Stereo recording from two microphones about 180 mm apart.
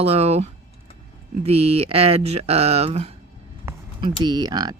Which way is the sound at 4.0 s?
25° right (ahead or behind).